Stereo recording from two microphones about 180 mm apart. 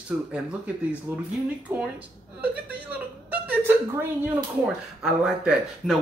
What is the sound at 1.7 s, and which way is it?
Speech, 10° right (ahead or behind).